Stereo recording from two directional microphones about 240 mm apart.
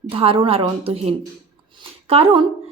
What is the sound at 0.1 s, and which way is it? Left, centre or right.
A woman's voice, right.